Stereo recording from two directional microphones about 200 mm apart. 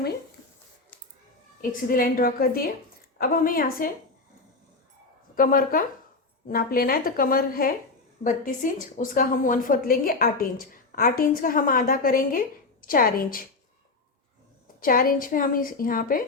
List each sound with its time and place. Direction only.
1.7 s a woman's voice: 45° left (ahead or behind)
5.3 s a woman's voice: 45° left (ahead or behind)
14.8 s a woman's voice: 45° left (ahead or behind)